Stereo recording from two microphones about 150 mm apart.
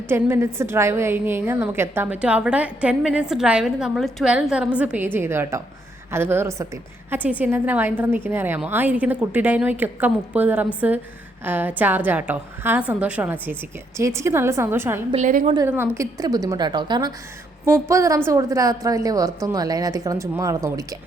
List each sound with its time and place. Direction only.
0.1 s a woman's voice: 15° right (ahead or behind)
15.1 s a woman's voice: 55° right (ahead or behind)
15.6 s a woman's voice: 15° right (ahead or behind)
17.7 s a woman's voice: 15° right (ahead or behind)